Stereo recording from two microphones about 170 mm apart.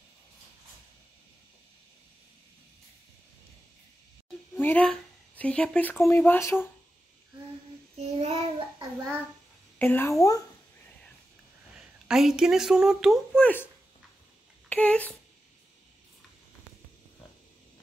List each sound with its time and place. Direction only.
4.6 s speech: 10° left (ahead or behind)
8.0 s child singing: 40° right (ahead or behind)
9.8 s speech: 10° left (ahead or behind)
11.7 s speech: 5° right (ahead or behind)
14.7 s speech: 10° left (ahead or behind)